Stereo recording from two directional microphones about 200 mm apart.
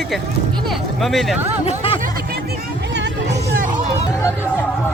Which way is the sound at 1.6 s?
25° left (ahead or behind).